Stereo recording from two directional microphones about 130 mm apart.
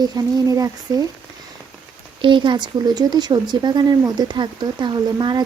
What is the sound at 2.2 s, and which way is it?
Speech, 40° right (ahead or behind).